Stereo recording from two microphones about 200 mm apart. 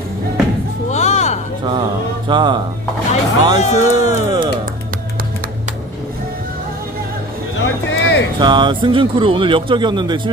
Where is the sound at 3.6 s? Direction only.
35° left (ahead or behind).